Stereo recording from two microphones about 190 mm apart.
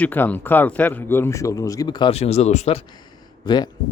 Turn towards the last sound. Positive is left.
turn(degrees=25)  # may be behind; listen again after turning